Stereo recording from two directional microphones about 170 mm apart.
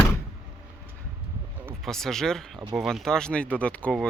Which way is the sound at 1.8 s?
Centre (ahead or behind).